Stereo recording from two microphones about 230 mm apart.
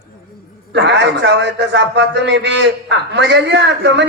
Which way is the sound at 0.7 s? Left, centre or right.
Right.